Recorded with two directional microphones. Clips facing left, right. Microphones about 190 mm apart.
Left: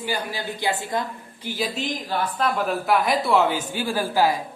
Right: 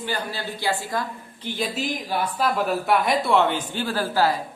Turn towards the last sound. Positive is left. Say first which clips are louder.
# left 1 dB
turn(degrees=15)  # may be behind; listen again after turning